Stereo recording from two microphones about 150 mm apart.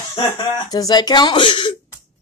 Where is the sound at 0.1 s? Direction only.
30° left (ahead or behind).